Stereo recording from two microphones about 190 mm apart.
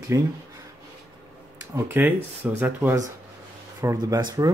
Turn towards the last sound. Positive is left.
turn(degrees=-20)  # may be behind; listen again after turning